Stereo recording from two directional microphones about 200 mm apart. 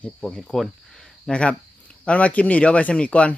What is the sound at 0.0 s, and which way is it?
Speech, 5° left (ahead or behind).